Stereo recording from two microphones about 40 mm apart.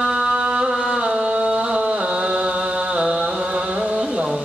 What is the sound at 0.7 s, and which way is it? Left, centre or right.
Music, centre.